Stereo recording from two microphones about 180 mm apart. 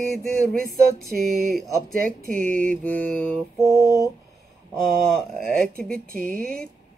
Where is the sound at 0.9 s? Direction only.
Centre (ahead or behind).